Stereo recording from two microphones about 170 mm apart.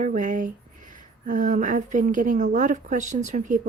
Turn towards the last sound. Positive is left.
turn(degrees=-45)  # may be behind; listen again after turning